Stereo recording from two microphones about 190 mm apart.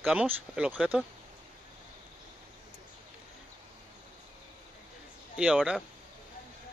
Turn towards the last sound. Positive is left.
turn(degrees=-5)  # may be behind; listen again after turning